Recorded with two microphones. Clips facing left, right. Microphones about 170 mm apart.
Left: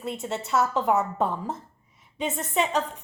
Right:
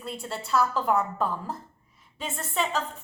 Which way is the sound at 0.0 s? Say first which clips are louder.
Left 4 dB; 20° left (ahead or behind).